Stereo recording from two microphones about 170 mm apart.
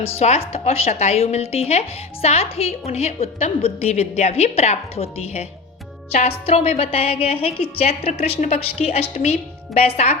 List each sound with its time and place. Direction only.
0.2 s a woman's voice: 40° left (ahead or behind)